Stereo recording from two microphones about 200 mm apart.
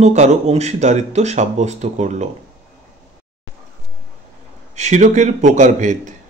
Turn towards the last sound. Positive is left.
turn(degrees=-40)  # may be behind; listen again after turning